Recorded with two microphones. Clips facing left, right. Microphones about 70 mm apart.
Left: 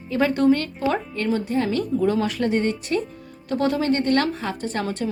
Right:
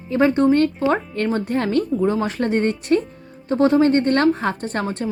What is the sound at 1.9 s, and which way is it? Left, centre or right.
A woman's voice, right.